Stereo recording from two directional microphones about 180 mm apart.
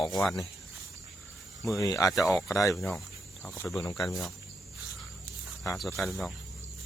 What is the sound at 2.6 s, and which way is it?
Speech, centre (ahead or behind).